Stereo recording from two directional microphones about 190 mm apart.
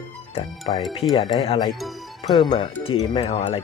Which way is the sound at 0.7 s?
30° left (ahead or behind).